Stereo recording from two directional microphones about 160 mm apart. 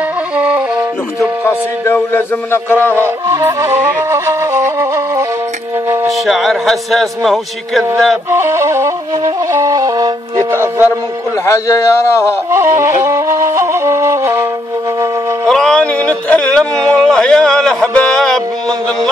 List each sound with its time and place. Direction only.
0.4 s music: 10° right (ahead or behind)
1.4 s a man's voice: 15° left (ahead or behind)
3.3 s music: 20° right (ahead or behind)
6.2 s a man's voice: centre (ahead or behind)
8.3 s music: 15° right (ahead or behind)
11.4 s a man's voice: 20° left (ahead or behind)
12.4 s music: 15° right (ahead or behind)
13.0 s flute: 15° right (ahead or behind)
15.4 s a sound: 5° left (ahead or behind)
16.7 s speech: 20° right (ahead or behind)
17.0 s a man's voice: 5° left (ahead or behind)